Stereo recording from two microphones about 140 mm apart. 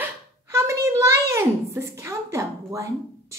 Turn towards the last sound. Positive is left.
turn(degrees=-20)  # may be behind; listen again after turning